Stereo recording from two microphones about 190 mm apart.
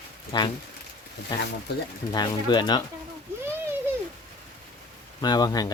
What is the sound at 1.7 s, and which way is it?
Speech, 60° left (ahead or behind).